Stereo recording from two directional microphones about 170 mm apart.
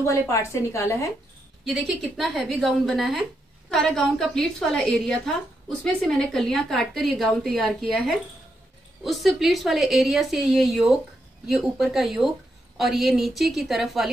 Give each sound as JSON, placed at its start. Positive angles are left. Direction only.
{"t": 0.0, "sound": "a woman's voice", "side_deg": 15}
{"t": 1.6, "sound": "a woman's voice", "side_deg": 0}